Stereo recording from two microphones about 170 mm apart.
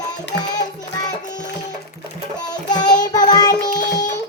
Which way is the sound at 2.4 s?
25° left (ahead or behind).